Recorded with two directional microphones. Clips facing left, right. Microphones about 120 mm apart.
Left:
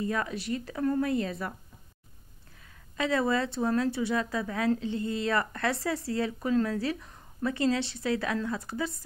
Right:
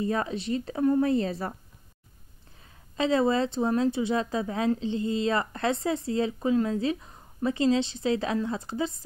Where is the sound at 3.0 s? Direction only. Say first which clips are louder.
Right 4 dB; 25° right (ahead or behind).